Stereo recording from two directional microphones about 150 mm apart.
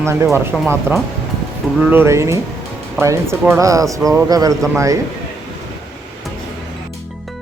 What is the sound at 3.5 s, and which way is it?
Speech, 20° right (ahead or behind).